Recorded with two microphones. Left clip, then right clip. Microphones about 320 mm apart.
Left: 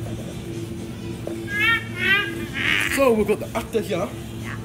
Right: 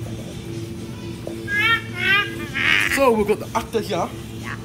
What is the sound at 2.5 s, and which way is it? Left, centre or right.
Honk, centre.